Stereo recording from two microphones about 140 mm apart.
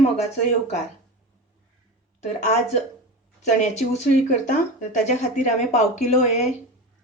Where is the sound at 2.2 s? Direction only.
55° left (ahead or behind).